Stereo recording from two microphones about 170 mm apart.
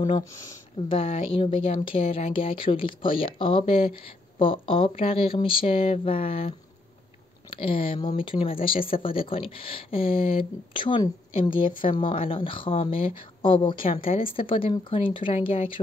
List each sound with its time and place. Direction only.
0.9 s speech: 35° left (ahead or behind)